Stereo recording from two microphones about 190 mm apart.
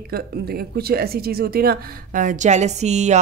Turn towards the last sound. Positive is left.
turn(degrees=-35)  # may be behind; listen again after turning